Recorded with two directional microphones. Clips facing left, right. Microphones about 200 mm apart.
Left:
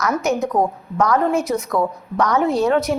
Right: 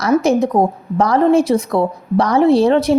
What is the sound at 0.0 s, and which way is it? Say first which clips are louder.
A woman's voice: right 6 dB; 30° right (ahead or behind).